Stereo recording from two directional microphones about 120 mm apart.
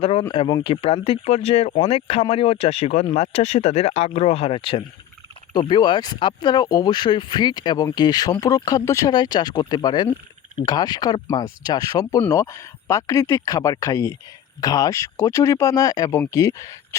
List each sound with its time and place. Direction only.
0.0 s speech: 55° left (ahead or behind)
0.3 s speech: 45° left (ahead or behind)
5.5 s speech: 35° left (ahead or behind)